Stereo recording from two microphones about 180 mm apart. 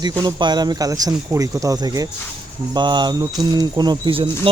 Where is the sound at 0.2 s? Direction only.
25° right (ahead or behind).